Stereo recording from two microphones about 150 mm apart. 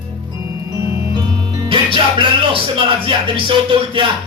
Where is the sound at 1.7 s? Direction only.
35° right (ahead or behind).